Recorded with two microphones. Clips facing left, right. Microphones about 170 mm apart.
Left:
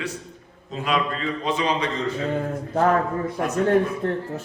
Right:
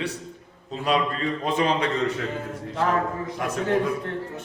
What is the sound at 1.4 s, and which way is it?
Speech, 55° right (ahead or behind).